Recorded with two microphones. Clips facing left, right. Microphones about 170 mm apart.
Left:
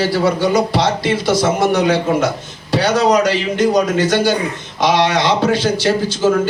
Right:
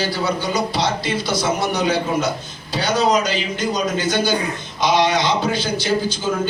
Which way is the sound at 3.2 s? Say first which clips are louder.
Left 7 dB; 80° left.